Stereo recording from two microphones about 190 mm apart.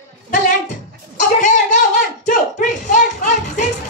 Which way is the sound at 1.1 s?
40° left (ahead or behind).